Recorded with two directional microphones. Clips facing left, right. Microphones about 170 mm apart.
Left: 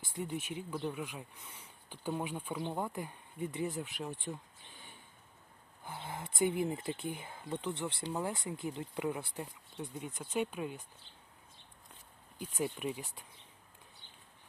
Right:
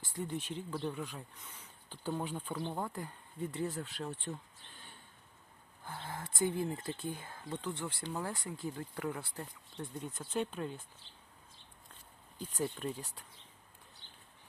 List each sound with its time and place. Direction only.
0.0 s speech: 10° left (ahead or behind)
12.4 s speech: 10° left (ahead or behind)